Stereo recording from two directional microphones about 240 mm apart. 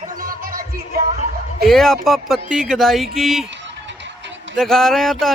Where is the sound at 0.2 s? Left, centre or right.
Right.